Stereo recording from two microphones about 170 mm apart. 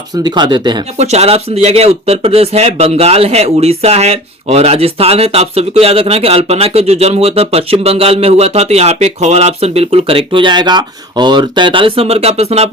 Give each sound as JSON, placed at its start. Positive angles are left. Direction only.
{"t": 0.2, "sound": "speech", "side_deg": -25}
{"t": 0.9, "sound": "speech", "side_deg": -40}